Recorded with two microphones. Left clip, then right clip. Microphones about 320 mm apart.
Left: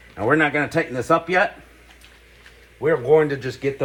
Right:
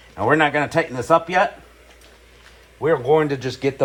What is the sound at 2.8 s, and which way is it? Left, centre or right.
Speech, right.